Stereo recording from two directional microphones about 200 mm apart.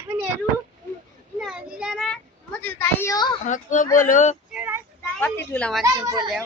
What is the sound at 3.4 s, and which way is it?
Speech, 40° left (ahead or behind).